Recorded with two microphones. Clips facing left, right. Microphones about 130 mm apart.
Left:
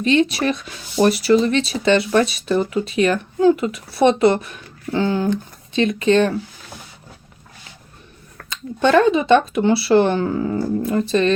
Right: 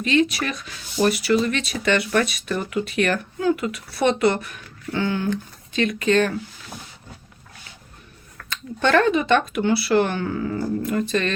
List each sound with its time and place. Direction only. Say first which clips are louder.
0.0 s speech: left 4 dB; 30° left (ahead or behind)
8.4 s speech: left 4 dB; 15° left (ahead or behind)